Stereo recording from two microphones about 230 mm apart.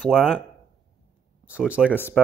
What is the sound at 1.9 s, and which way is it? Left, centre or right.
Speech, centre.